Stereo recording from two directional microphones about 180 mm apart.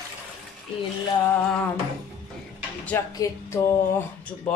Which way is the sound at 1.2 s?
10° left (ahead or behind).